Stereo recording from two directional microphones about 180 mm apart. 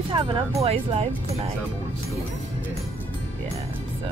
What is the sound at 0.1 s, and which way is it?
Speech, 30° right (ahead or behind).